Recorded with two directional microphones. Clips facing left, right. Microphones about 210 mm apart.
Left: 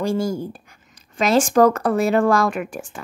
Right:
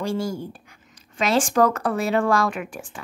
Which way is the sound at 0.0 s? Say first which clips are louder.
Left 4 dB; 45° left (ahead or behind).